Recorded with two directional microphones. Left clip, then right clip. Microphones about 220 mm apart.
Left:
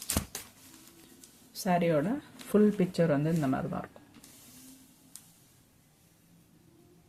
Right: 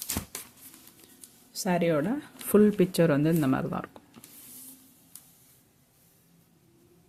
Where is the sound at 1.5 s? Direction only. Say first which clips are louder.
Right 1 dB; 25° right (ahead or behind).